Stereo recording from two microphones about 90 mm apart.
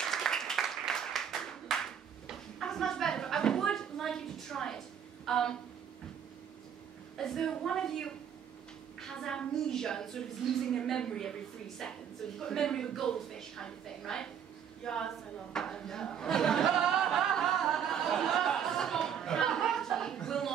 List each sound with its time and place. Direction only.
0.0 s applause: 5° left (ahead or behind)
7.2 s a woman's voice: 5° left (ahead or behind)
16.7 s a sound: 5° right (ahead or behind)